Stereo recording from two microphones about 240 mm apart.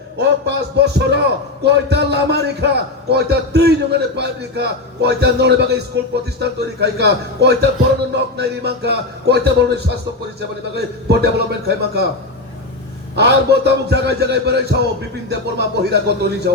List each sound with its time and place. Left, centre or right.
0.2 s a man's voice: right
13.1 s a man's voice: right